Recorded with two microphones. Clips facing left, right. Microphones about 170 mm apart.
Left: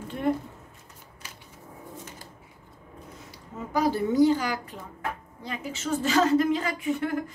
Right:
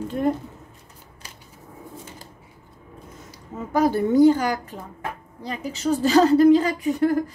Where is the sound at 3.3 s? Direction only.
50° right (ahead or behind).